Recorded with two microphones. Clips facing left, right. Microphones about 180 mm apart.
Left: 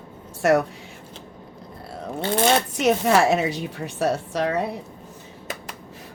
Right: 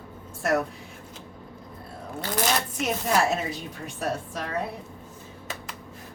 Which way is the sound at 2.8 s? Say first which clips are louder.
Left 6 dB; 80° left.